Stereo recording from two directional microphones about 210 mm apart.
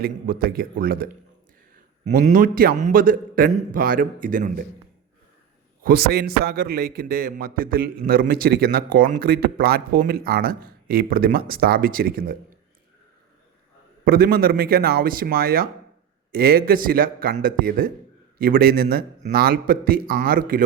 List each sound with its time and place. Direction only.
0.0 s a man's voice: 45° right (ahead or behind)
5.8 s a man's voice: 45° right (ahead or behind)
14.0 s a man's voice: 45° right (ahead or behind)